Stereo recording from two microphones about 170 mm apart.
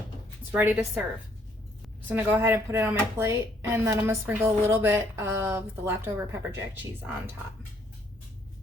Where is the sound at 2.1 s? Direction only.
10° right (ahead or behind).